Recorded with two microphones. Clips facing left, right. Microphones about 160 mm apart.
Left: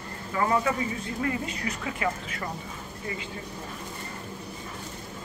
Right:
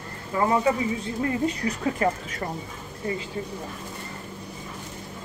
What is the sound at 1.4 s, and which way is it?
Speech, 35° right (ahead or behind).